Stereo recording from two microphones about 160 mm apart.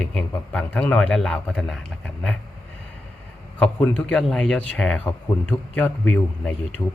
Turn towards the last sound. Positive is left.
turn(degrees=10)  # may be behind; listen again after turning